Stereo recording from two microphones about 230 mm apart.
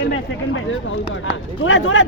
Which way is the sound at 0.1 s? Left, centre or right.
Left.